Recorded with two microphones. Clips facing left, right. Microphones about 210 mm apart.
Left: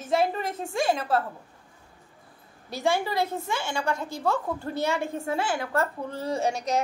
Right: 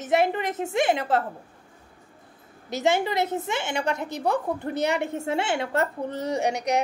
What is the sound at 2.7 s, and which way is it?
A woman's voice, 20° right (ahead or behind).